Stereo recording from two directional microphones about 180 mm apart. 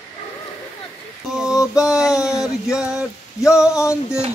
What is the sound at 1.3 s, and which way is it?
Speech, 5° right (ahead or behind).